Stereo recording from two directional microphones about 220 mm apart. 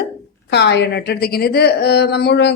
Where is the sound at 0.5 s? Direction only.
50° left (ahead or behind).